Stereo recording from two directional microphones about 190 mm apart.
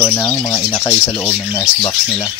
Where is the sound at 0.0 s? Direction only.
15° left (ahead or behind).